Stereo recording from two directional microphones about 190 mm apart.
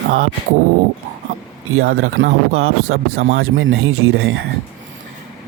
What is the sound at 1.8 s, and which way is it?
Speech, 90° right.